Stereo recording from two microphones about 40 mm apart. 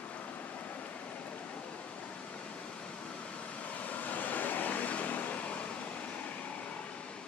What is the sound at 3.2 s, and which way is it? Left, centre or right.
Vehicle, left.